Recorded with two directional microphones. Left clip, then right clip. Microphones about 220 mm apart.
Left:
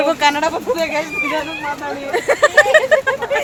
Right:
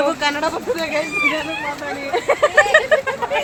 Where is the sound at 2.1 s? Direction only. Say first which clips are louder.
Left 2 dB; 15° left (ahead or behind).